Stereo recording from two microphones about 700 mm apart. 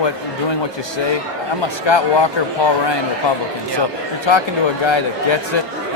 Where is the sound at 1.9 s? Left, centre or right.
Left.